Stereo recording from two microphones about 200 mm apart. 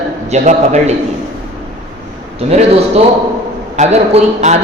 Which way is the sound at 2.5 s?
30° right (ahead or behind).